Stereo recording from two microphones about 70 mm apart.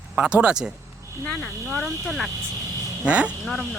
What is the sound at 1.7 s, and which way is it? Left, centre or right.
Speech, centre.